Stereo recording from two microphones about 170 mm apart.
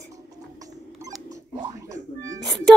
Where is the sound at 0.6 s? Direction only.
20° right (ahead or behind).